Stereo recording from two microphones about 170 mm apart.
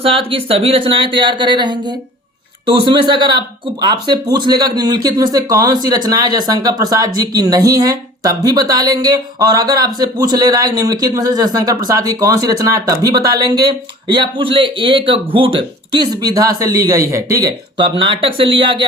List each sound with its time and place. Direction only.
0.0 s speech: 30° right (ahead or behind)